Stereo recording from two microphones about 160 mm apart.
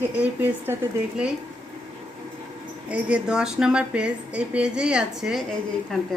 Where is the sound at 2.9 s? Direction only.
5° right (ahead or behind).